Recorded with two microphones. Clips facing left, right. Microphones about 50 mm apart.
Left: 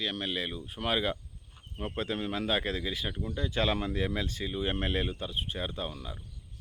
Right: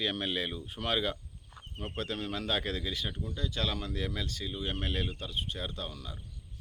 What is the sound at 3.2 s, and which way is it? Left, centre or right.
Speech, left.